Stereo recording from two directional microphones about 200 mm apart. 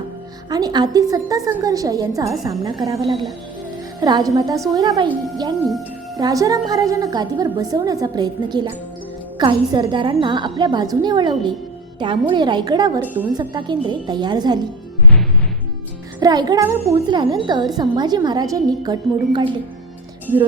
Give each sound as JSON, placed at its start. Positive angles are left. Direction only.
{"t": 0.5, "sound": "a woman's voice", "side_deg": -20}
{"t": 3.1, "sound": "speech", "side_deg": 0}
{"t": 4.0, "sound": "a woman's voice", "side_deg": -20}
{"t": 6.1, "sound": "a woman's voice", "side_deg": -20}
{"t": 16.2, "sound": "a woman's voice", "side_deg": -20}